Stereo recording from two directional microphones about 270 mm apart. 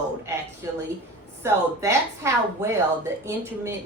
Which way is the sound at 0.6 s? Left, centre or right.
Centre.